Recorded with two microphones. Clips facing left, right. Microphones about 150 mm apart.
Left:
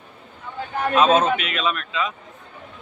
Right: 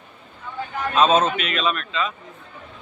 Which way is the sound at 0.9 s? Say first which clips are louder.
Even; 10° left (ahead or behind).